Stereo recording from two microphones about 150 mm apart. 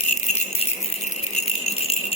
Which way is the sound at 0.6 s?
45° left (ahead or behind).